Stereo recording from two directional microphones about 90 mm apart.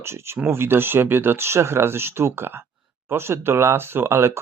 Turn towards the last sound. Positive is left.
turn(degrees=-30)  # may be behind; listen again after turning